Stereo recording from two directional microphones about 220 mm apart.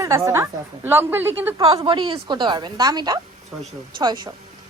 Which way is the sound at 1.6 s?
25° right (ahead or behind).